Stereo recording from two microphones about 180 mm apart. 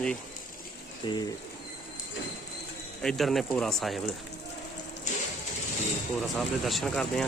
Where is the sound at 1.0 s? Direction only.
25° left (ahead or behind).